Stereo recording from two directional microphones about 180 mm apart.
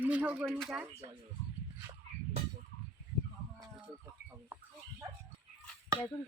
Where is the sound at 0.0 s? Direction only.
10° right (ahead or behind).